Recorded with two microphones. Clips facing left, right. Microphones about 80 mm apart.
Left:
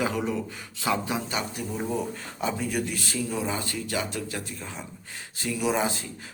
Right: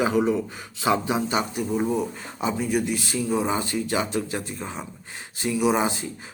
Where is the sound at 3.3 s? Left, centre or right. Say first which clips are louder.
Right 9 dB; right.